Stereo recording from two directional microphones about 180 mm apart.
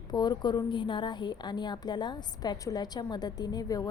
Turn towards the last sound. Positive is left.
turn(degrees=20)  # may be behind; listen again after turning